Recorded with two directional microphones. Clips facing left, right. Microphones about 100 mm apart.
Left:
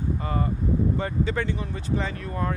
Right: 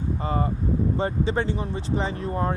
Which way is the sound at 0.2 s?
25° right (ahead or behind).